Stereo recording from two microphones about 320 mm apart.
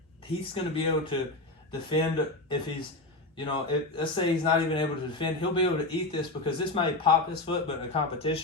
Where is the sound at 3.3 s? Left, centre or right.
Centre.